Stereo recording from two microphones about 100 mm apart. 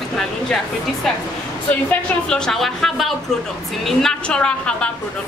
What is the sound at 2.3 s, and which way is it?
A woman's voice, 5° left (ahead or behind).